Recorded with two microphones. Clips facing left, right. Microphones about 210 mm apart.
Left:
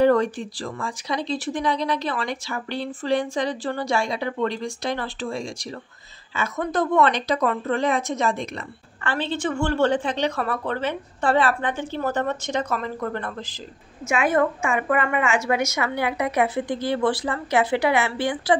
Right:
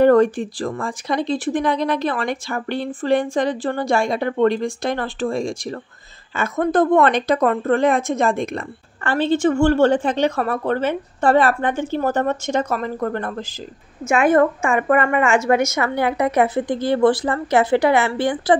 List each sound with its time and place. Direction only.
0.0 s a woman's voice: 55° right (ahead or behind)